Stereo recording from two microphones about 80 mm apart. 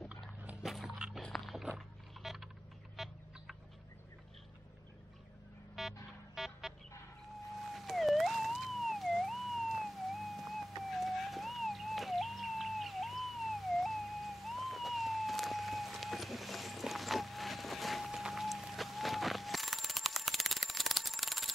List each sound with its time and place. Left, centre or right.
0.6 s music: centre
1.2 s a sound: centre
5.8 s music: centre
7.7 s police car: centre
10.9 s music: centre